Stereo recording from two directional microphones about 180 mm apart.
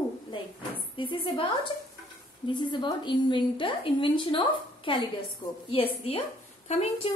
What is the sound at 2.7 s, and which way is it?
A woman's voice, 25° left (ahead or behind).